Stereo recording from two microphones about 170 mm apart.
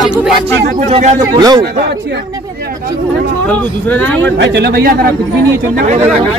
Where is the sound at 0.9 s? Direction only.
40° right (ahead or behind).